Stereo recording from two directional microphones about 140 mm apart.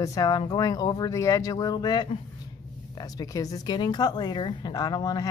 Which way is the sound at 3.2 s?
25° left (ahead or behind).